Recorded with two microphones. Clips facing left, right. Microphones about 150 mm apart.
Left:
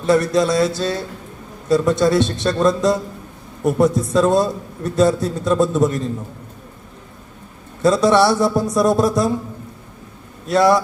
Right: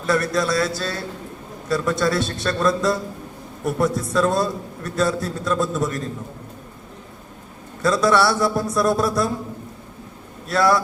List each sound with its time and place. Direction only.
0.0 s a man's voice: 25° left (ahead or behind)
7.8 s a man's voice: 25° left (ahead or behind)
10.5 s a man's voice: 20° left (ahead or behind)